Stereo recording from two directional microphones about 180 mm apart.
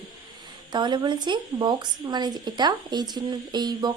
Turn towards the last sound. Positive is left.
turn(degrees=-25)  # may be behind; listen again after turning